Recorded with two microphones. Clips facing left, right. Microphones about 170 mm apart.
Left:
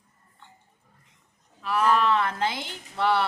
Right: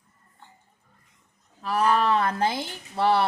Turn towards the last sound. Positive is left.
turn(degrees=-40)  # may be behind; listen again after turning